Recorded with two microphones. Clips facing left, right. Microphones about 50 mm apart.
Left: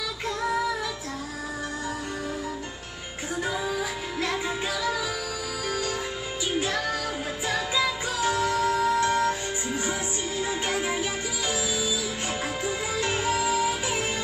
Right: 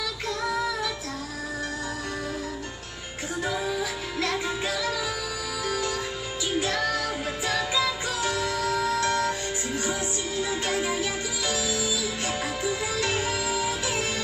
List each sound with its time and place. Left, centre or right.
6.6 s music: centre